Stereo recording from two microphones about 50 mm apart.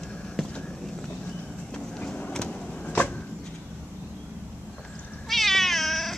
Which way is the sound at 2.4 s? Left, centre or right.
Centre.